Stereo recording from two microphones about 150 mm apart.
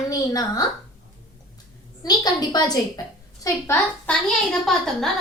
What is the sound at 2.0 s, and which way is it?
A woman's voice, 25° left (ahead or behind).